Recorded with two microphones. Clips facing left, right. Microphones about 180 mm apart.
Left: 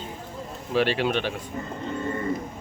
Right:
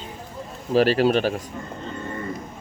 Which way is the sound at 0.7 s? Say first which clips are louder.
Right 5 dB; 40° right (ahead or behind).